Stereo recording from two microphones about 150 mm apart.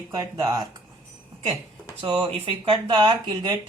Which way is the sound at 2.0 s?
35° right (ahead or behind).